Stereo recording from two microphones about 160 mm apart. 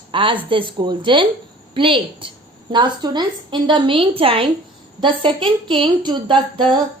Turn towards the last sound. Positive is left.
turn(degrees=-30)  # may be behind; listen again after turning